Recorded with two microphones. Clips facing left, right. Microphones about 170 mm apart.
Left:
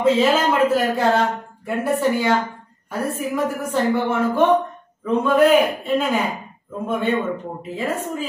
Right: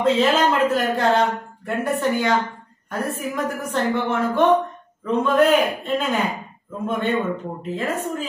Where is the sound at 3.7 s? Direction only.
10° left (ahead or behind).